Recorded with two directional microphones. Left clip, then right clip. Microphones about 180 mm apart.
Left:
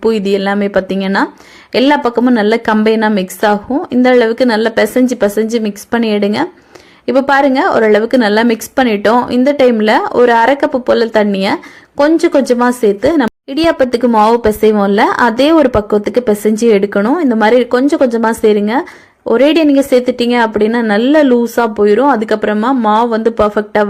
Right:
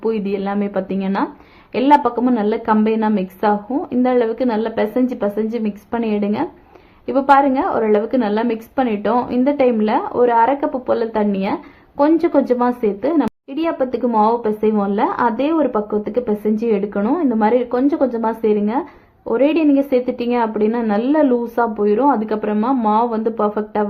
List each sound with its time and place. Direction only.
0.0 s a woman's voice: 30° left (ahead or behind)